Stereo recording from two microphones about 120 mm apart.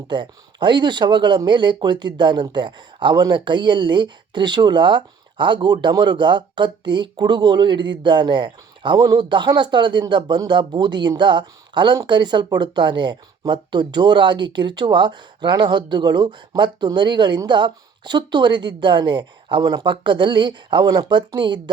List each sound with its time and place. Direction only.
0.1 s speech: 40° right (ahead or behind)